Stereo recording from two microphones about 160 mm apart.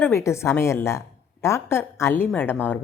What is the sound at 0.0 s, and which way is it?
A woman's voice, 15° left (ahead or behind).